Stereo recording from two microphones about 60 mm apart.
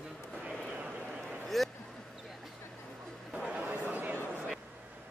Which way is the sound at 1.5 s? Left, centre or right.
Centre.